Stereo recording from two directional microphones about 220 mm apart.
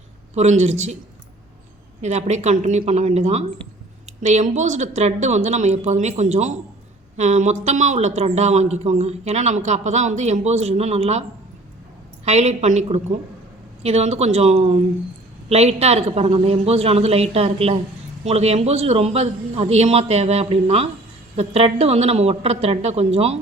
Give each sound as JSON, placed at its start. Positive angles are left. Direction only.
{"t": 0.3, "sound": "speech", "side_deg": -30}
{"t": 2.0, "sound": "a man's voice", "side_deg": -30}